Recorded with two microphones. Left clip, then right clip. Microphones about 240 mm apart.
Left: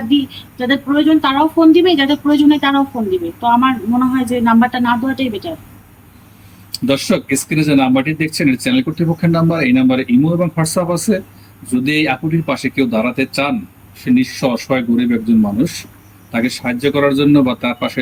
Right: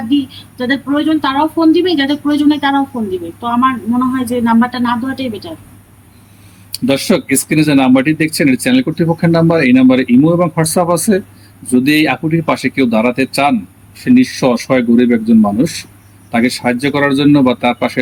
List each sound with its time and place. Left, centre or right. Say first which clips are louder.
0.1 s a woman's voice: even; centre
6.7 s speech: right 2 dB; centre